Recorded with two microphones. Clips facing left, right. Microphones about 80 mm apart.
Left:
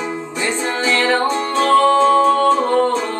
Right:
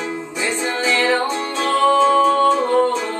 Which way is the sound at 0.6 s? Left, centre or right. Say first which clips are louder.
Left 1 dB; centre.